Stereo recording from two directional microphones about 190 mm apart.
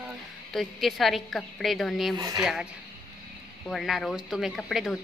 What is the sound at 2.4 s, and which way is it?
A woman's voice, 5° right (ahead or behind).